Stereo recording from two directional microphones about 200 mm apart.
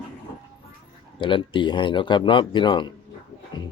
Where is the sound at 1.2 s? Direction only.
25° left (ahead or behind).